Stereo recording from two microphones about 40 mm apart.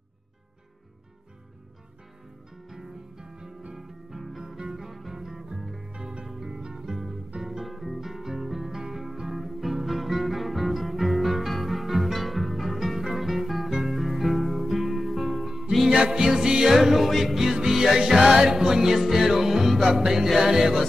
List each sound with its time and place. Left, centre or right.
2.7 s music: centre
5.9 s music: right
6.2 s music: centre
15.9 s music: centre
16.7 s music: centre